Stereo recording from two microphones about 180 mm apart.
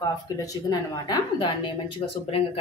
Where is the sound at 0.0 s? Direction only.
20° left (ahead or behind).